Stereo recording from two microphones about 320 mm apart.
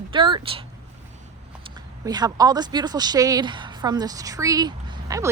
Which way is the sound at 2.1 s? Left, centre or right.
Centre.